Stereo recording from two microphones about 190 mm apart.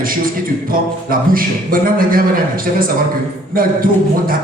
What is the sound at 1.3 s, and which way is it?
Beatboxing, 50° right (ahead or behind).